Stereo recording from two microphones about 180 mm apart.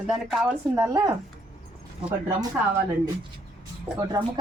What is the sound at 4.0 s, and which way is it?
Speech, 25° right (ahead or behind).